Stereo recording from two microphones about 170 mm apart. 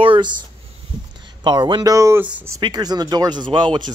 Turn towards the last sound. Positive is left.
turn(degrees=-25)  # may be behind; listen again after turning